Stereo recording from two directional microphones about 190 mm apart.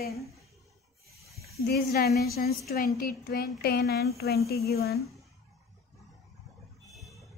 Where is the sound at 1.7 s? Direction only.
55° left (ahead or behind).